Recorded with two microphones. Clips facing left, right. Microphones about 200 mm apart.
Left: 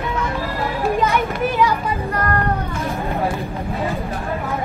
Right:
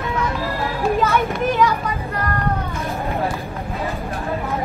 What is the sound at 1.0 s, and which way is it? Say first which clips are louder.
Children playing: even; 15° left (ahead or behind).